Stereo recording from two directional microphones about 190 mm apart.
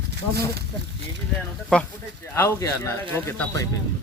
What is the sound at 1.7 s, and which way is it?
Speech, 10° left (ahead or behind).